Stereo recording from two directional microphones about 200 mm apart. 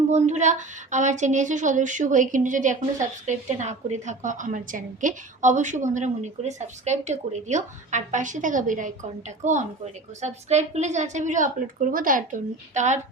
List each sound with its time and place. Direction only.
0.1 s a woman's voice: 35° right (ahead or behind)